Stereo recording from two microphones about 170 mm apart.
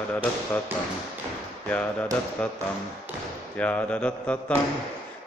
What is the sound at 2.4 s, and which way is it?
A man's voice, 5° left (ahead or behind).